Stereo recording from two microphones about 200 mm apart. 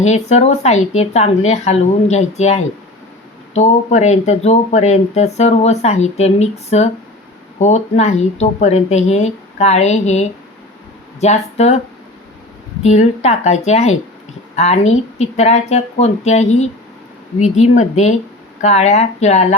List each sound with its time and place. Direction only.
0.0 s speech: 35° left (ahead or behind)
12.8 s speech: 35° left (ahead or behind)